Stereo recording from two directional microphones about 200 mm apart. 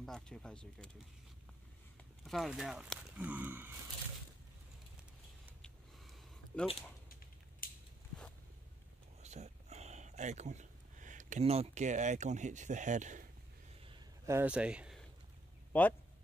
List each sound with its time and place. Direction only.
0.0 s speech: 5° left (ahead or behind)
2.2 s speech: centre (ahead or behind)
5.6 s a sound: 5° left (ahead or behind)
7.6 s biting: 45° left (ahead or behind)
9.2 s a sound: 35° right (ahead or behind)
14.2 s speech: 10° right (ahead or behind)
15.7 s speech: 10° left (ahead or behind)